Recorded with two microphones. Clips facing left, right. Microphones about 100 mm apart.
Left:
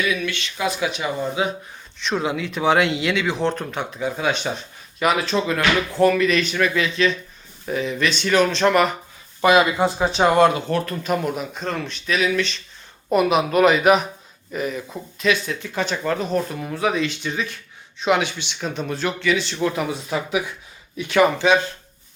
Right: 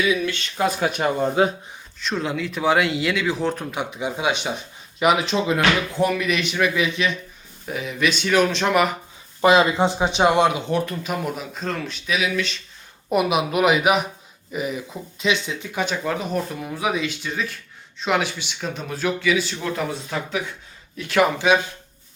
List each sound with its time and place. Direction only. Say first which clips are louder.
0.3 s speech: right 2 dB; 40° right (ahead or behind)
2.0 s speech: left 2 dB; centre (ahead or behind)
9.4 s speech: even; 25° right (ahead or behind)
10.9 s speech: left 4 dB; centre (ahead or behind)
19.6 s speech: left 3 dB; 5° left (ahead or behind)